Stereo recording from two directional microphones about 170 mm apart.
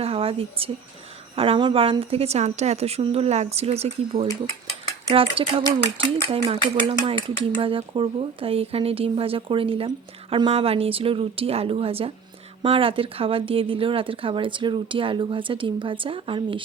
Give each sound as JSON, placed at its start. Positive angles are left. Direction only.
{"t": 0.0, "sound": "speech", "side_deg": -35}